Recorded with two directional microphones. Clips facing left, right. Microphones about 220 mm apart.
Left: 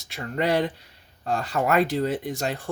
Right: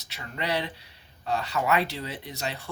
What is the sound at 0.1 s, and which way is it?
Speech, 50° left (ahead or behind).